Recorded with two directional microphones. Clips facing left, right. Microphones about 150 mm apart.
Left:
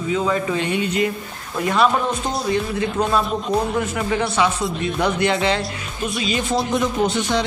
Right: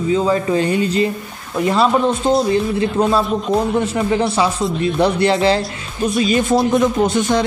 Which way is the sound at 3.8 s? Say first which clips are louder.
Right 5 dB; 30° right (ahead or behind).